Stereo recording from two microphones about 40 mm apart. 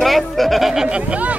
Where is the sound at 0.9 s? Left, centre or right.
Right.